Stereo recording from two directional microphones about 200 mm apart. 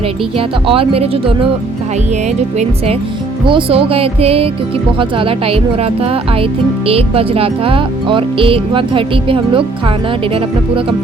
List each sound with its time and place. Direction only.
0.3 s speech: 25° right (ahead or behind)
3.4 s speech: 25° right (ahead or behind)